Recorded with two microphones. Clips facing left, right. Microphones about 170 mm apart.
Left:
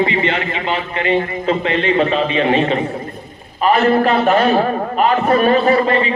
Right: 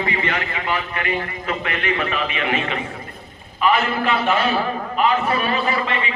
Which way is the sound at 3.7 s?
45° left (ahead or behind).